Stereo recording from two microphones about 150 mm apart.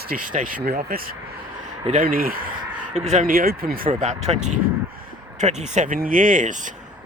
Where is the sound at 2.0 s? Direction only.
70° right (ahead or behind).